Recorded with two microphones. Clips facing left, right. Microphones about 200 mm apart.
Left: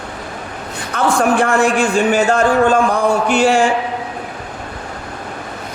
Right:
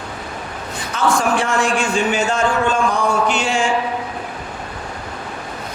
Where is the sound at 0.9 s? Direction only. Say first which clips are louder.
Left 3 dB; 60° left (ahead or behind).